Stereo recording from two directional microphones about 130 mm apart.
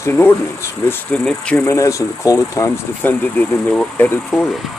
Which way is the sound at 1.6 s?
25° left (ahead or behind).